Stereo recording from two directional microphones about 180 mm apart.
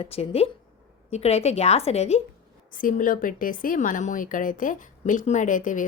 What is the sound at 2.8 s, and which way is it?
Speech, 50° left (ahead or behind).